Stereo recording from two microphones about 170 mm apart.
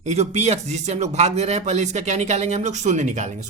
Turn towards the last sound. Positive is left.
turn(degrees=-45)  # may be behind; listen again after turning